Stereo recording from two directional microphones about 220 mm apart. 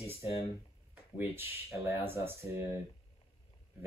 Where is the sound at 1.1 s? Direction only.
10° right (ahead or behind).